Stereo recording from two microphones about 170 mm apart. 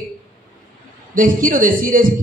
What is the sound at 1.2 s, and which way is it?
Speech, 55° right (ahead or behind).